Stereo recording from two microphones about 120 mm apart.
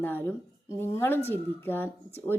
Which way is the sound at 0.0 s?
15° left (ahead or behind).